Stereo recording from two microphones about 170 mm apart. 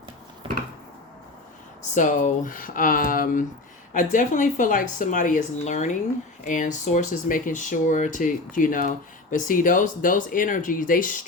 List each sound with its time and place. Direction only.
1.8 s speech: 50° left (ahead or behind)